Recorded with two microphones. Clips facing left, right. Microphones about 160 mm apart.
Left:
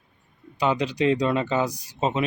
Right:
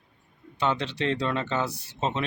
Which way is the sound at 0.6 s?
10° left (ahead or behind).